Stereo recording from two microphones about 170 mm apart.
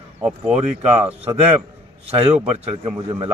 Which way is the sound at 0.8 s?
35° right (ahead or behind).